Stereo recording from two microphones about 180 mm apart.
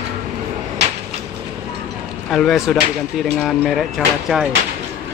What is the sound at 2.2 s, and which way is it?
Speech, centre (ahead or behind).